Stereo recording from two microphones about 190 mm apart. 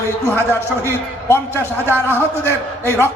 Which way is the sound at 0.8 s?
10° left (ahead or behind).